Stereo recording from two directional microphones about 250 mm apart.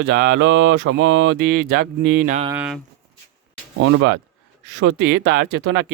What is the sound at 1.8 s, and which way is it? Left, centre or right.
Speech, right.